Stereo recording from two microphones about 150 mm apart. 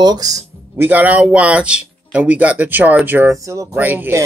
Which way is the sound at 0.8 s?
10° right (ahead or behind).